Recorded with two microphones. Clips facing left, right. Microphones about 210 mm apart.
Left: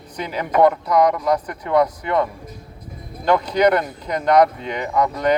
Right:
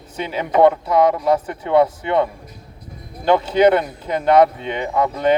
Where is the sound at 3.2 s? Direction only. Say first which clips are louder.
Right 2 dB; 30° right (ahead or behind).